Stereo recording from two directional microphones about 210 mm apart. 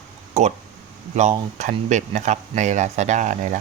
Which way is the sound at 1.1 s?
35° right (ahead or behind).